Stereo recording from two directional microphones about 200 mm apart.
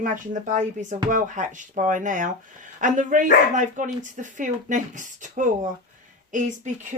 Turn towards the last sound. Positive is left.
turn(degrees=-40)  # may be behind; listen again after turning